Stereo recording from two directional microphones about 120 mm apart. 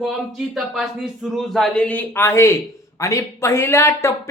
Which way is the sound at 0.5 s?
5° right (ahead or behind).